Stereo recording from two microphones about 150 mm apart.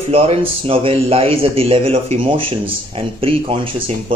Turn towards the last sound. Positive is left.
turn(degrees=-40)  # may be behind; listen again after turning